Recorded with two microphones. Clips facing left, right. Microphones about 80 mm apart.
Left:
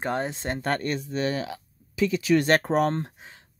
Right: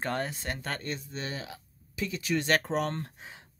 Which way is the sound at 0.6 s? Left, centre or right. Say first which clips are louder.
Left 9 dB; left.